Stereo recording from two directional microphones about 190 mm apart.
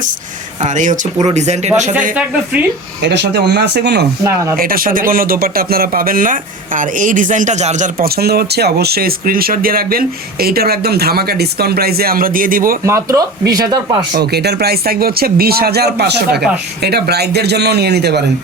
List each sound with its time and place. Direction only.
0.6 s speech: 40° right (ahead or behind)
2.1 s speech: 5° right (ahead or behind)
3.0 s speech: 65° right (ahead or behind)
4.2 s speech: 15° right (ahead or behind)
4.5 s a man's voice: 50° right (ahead or behind)
12.8 s speech: 15° right (ahead or behind)
14.1 s speech: 60° right (ahead or behind)